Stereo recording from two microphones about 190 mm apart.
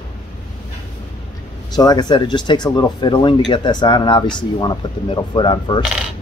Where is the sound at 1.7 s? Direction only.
20° left (ahead or behind).